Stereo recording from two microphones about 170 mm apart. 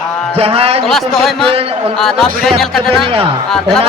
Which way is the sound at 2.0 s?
Centre (ahead or behind).